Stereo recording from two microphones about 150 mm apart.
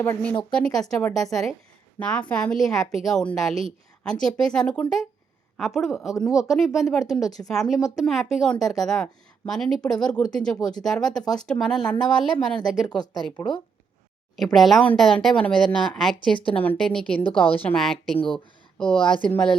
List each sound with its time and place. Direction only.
0.0 s a woman's voice: 15° left (ahead or behind)
0.5 s a woman's voice: 5° left (ahead or behind)
14.3 s a woman's voice: centre (ahead or behind)